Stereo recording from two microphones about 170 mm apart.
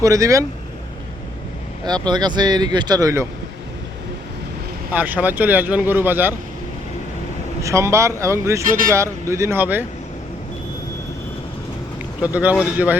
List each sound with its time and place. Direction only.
0.0 s speech: 20° right (ahead or behind)
1.8 s speech: 25° right (ahead or behind)
4.9 s speech: 10° right (ahead or behind)
7.6 s speech: 15° right (ahead or behind)
12.2 s speech: 10° right (ahead or behind)